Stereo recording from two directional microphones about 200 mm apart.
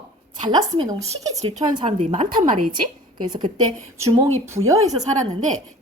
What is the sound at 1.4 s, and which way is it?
Speech, 35° right (ahead or behind).